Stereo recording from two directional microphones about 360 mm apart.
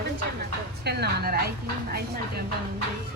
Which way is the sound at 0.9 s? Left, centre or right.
Right.